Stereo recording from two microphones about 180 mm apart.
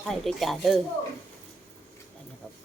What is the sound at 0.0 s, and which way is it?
Speech, centre (ahead or behind).